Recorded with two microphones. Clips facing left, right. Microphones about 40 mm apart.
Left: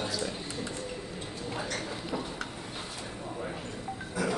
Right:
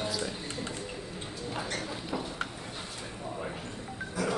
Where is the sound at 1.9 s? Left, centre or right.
Centre.